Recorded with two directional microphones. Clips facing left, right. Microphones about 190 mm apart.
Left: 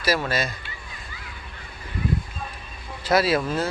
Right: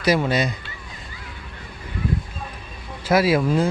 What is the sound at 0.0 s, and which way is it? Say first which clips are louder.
Speech: right 5 dB; 15° right (ahead or behind).